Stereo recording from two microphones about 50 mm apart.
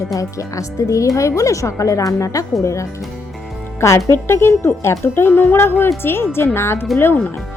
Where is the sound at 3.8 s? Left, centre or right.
Left.